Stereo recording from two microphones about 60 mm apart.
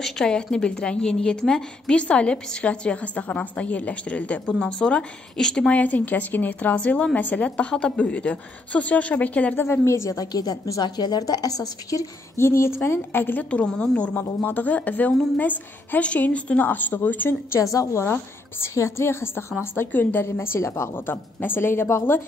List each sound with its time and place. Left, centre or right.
0.0 s a woman's voice: centre
5.8 s a woman's voice: left
9.6 s a woman's voice: left
10.1 s a woman's voice: left
12.4 s a woman's voice: left
13.5 s a woman's voice: centre
17.6 s a woman's voice: left
18.8 s a woman's voice: left
20.2 s a woman's voice: left
20.9 s speech: left